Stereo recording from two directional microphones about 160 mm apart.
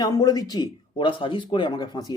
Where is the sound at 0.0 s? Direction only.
20° left (ahead or behind).